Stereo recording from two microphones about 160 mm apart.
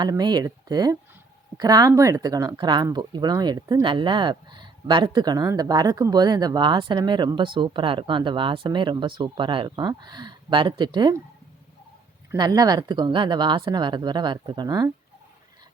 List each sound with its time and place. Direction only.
0.0 s speech: 25° right (ahead or behind)
12.3 s speech: 25° right (ahead or behind)